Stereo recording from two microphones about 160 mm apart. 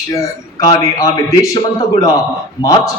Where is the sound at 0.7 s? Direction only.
20° left (ahead or behind).